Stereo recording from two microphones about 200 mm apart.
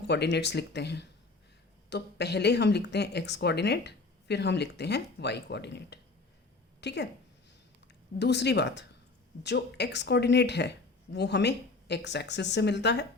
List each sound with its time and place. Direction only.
0.0 s a woman's voice: 55° left (ahead or behind)
8.2 s a woman's voice: 60° left (ahead or behind)